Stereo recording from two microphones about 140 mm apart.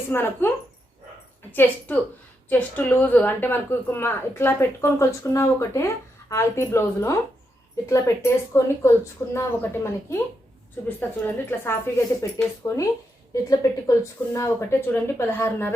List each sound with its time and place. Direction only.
0.1 s a woman's voice: 15° left (ahead or behind)
1.5 s a woman's voice: 15° left (ahead or behind)